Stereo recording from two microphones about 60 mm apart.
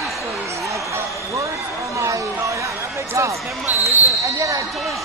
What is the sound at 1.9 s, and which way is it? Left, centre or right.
Chatter, right.